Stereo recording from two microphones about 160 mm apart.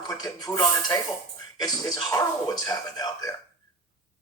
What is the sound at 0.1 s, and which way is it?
Speech, 25° left (ahead or behind).